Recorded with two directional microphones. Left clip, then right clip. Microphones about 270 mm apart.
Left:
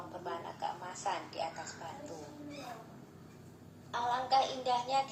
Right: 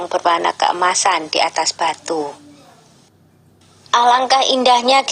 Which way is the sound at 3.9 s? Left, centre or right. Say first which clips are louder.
Right 19 dB; right.